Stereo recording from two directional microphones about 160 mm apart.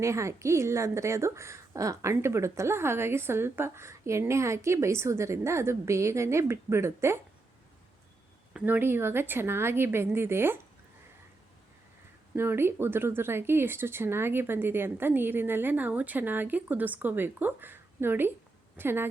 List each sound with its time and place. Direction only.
0.0 s a woman's voice: 20° right (ahead or behind)
8.5 s a woman's voice: 10° right (ahead or behind)
12.3 s a woman's voice: 15° right (ahead or behind)